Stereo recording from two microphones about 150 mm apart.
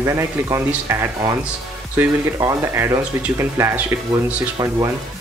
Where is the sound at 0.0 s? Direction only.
20° right (ahead or behind).